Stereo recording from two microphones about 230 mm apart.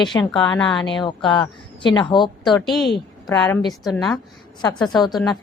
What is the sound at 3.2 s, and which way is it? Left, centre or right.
Speech, centre.